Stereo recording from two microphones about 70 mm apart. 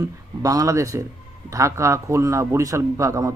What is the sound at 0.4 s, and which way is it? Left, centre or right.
A man's voice, right.